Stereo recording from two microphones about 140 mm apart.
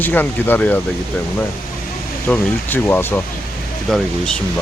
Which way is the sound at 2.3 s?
15° left (ahead or behind).